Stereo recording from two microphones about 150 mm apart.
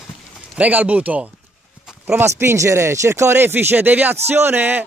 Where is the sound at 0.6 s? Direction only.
10° right (ahead or behind).